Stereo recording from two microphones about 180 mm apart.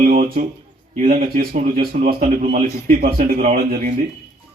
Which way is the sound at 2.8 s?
50° right (ahead or behind).